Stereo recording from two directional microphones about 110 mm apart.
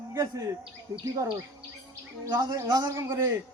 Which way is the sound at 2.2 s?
40° right (ahead or behind).